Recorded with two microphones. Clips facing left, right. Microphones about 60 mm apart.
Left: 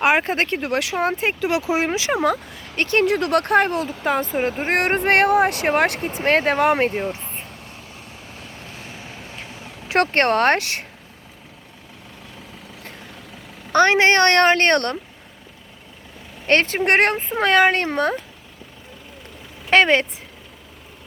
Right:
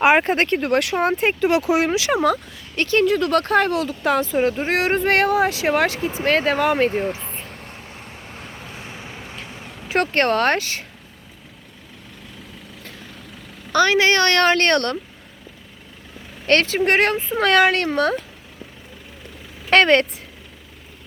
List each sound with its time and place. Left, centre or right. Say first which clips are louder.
0.0 s speech: right 2 dB; centre
1.5 s speech: right 3 dB; centre
2.1 s speech: right 1 dB; centre
2.7 s a woman's voice: right 1 dB; left
4.7 s a woman's voice: left 3 dB; left
7.2 s vehicle: right 1 dB; right
7.6 s vehicle: right 2 dB; right
9.9 s speech: left 1 dB; left
10.6 s speech: left 1 dB; left
13.7 s a woman's voice: left 1 dB; left
16.6 s a woman's voice: even; left
17.3 s speech: even; left
19.7 s speech: right 1 dB; centre